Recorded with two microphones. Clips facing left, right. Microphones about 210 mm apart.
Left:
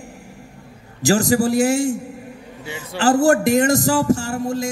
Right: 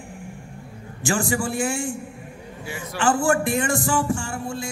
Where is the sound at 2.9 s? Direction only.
40° left (ahead or behind).